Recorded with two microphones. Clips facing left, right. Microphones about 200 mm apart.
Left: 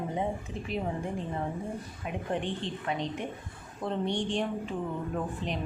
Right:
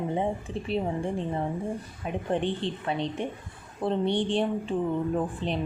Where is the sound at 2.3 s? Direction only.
30° right (ahead or behind).